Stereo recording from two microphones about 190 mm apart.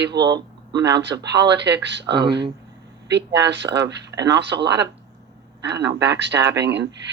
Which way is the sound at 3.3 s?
65° right (ahead or behind).